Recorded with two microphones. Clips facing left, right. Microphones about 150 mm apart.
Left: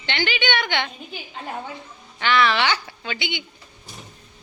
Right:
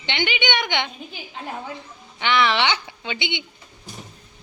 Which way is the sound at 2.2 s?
20° right (ahead or behind).